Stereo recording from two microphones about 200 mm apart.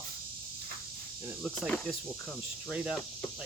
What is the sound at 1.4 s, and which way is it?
Speech, centre (ahead or behind).